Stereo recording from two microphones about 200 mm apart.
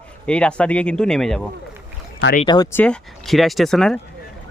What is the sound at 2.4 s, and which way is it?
Speech, 20° left (ahead or behind).